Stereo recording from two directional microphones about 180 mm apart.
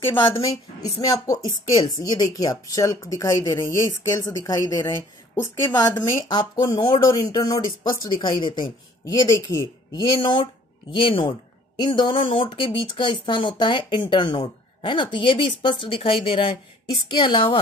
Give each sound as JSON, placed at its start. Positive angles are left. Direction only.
{"t": 0.1, "sound": "speech", "side_deg": 25}